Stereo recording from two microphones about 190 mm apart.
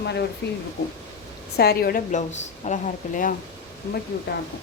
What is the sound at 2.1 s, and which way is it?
A woman's voice, 40° left (ahead or behind).